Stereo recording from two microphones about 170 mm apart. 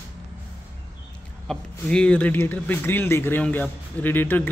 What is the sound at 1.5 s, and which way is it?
Speech, 5° left (ahead or behind).